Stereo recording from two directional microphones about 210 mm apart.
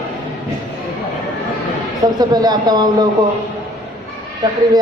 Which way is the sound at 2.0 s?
20° right (ahead or behind).